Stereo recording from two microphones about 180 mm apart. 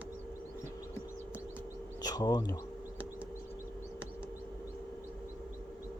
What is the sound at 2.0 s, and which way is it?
Speech, 20° left (ahead or behind).